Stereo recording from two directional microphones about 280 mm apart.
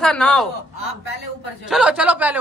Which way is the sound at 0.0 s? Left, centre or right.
Centre.